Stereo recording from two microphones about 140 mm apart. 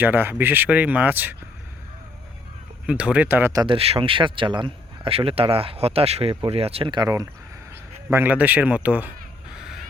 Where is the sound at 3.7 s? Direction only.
45° right (ahead or behind).